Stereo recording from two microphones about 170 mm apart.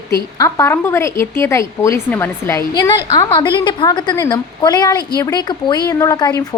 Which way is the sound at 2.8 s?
25° left (ahead or behind).